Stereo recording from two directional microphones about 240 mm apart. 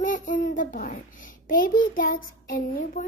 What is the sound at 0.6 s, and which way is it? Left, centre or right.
A woman's voice, left.